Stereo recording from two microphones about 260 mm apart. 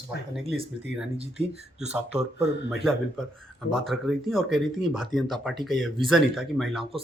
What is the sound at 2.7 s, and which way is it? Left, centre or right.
Speech, centre.